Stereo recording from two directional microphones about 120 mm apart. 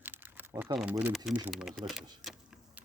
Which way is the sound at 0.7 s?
40° right (ahead or behind).